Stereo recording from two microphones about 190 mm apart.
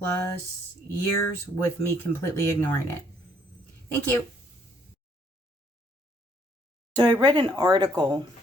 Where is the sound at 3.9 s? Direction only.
10° left (ahead or behind).